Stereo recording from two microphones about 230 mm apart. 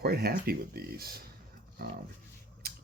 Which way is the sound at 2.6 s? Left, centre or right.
Right.